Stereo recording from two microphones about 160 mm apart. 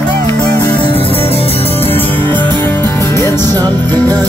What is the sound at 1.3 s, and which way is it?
Music, 40° left (ahead or behind).